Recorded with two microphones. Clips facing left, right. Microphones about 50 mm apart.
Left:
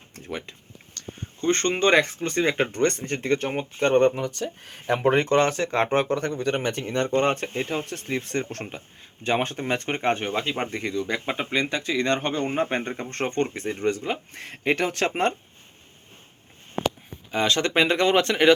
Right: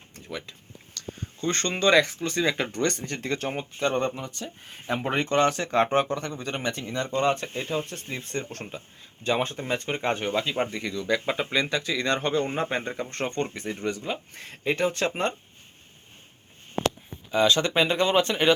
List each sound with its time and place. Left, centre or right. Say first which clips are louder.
0.3 s speech: left 3 dB; left
0.9 s a sound: right 1 dB; left
1.8 s speech: right 2 dB; left
3.8 s speech: left 8 dB; left
6.1 s speech: left 6 dB; left
9.2 s speech: left 2 dB; left
10.0 s speech: left 2 dB; left
11.0 s speech: right 1 dB; left
13.0 s speech: left 3 dB; left
17.3 s speech: even; left